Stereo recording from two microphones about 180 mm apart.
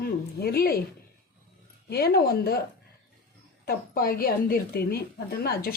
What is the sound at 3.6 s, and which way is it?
A woman's voice, 55° left (ahead or behind).